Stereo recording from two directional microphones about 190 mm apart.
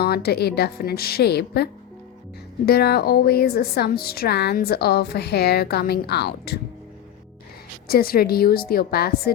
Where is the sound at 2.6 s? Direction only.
55° left (ahead or behind).